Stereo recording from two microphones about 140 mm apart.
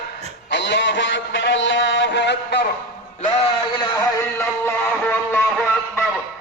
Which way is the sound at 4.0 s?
20° left (ahead or behind).